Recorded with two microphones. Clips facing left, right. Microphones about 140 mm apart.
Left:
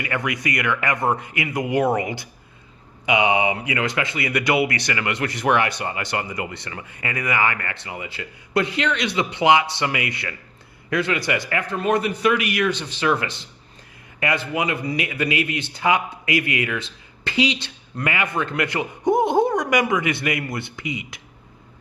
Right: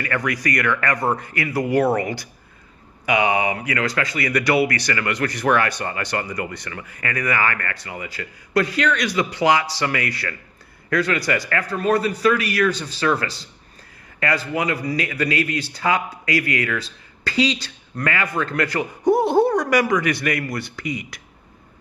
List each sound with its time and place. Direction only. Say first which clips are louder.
0.0 s speech: right 2 dB; 20° left (ahead or behind)